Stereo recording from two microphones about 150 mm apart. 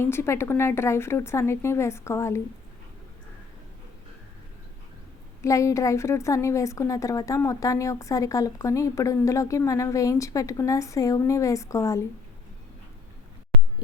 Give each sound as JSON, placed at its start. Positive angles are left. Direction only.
{"t": 0.0, "sound": "a woman's voice", "side_deg": 15}
{"t": 5.4, "sound": "a woman's voice", "side_deg": 20}